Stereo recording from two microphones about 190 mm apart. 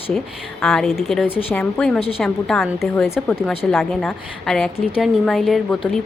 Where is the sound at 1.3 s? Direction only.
30° left (ahead or behind).